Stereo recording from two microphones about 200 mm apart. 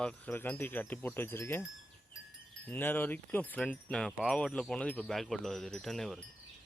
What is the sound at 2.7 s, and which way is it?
Speech, 10° left (ahead or behind).